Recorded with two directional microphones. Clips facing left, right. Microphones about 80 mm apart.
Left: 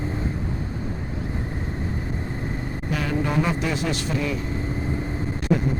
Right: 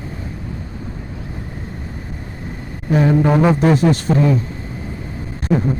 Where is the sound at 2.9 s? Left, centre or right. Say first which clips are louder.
Right 11 dB; right.